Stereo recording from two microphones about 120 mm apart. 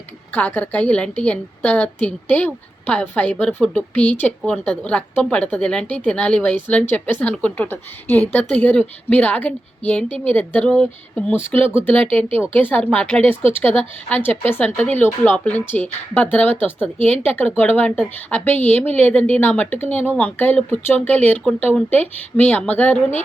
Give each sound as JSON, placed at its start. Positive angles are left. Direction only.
{"t": 0.3, "sound": "a woman's voice", "side_deg": 15}